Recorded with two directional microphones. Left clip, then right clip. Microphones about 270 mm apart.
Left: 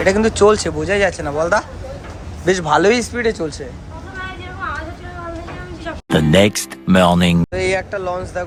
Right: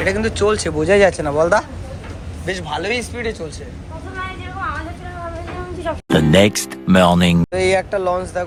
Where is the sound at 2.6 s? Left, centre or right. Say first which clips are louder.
Left 8 dB; left.